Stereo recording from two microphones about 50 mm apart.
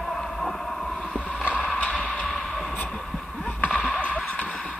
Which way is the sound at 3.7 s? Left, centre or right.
Centre.